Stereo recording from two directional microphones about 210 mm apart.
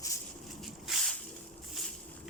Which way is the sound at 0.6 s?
Centre (ahead or behind).